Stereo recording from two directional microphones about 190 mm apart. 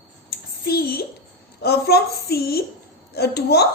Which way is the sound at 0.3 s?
55° left (ahead or behind).